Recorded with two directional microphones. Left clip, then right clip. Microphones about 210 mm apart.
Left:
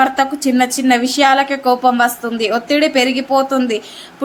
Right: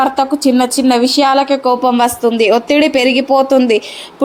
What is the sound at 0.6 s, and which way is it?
A woman's voice, 15° right (ahead or behind).